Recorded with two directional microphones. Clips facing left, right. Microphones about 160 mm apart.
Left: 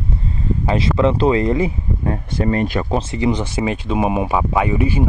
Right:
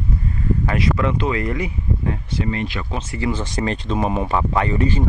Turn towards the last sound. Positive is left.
turn(degrees=10)  # may be behind; listen again after turning